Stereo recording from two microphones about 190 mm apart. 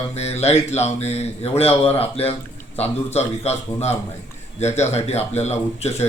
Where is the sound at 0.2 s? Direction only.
35° left (ahead or behind).